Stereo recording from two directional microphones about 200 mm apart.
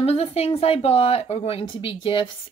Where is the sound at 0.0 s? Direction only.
30° left (ahead or behind).